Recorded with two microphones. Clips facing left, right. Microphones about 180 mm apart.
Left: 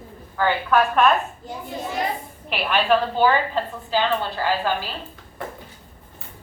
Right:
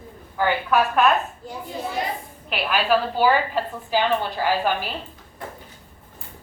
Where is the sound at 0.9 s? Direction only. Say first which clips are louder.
Left 1 dB; 5° right (ahead or behind).